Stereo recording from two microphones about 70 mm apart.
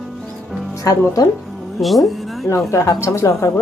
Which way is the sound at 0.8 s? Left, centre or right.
Left.